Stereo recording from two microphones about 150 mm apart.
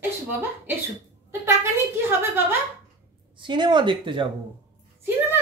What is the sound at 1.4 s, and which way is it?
A child's voice, 15° right (ahead or behind).